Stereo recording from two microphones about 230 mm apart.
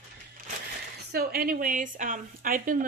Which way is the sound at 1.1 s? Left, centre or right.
Right.